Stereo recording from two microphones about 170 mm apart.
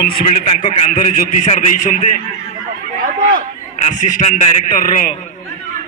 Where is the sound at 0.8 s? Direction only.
45° left (ahead or behind).